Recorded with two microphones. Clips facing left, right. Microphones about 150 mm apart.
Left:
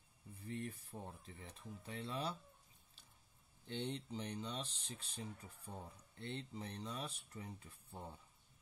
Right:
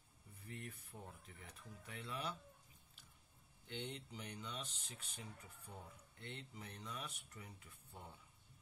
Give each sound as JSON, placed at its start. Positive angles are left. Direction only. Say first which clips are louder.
{"t": 0.5, "sound": "speech", "louder": "left 7 dB", "side_deg": 30}
{"t": 3.6, "sound": "speech", "louder": "left 5 dB", "side_deg": 35}